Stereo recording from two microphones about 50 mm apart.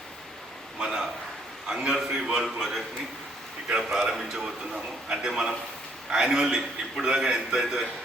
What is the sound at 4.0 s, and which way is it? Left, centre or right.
A man's voice, centre.